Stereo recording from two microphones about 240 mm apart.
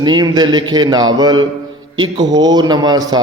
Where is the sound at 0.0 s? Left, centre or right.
Centre.